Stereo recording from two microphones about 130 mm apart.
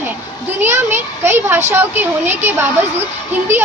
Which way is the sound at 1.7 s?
15° right (ahead or behind).